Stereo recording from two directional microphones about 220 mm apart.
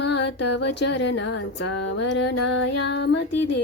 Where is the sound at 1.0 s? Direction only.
55° left (ahead or behind); by 1.8 s 75° left (ahead or behind).